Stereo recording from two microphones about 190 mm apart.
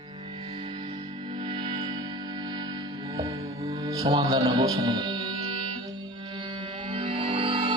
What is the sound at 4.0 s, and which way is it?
Speech, 30° right (ahead or behind).